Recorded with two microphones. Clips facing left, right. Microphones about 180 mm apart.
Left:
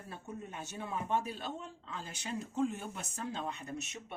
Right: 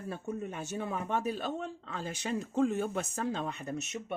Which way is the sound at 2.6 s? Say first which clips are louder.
Right 5 dB; 90° right.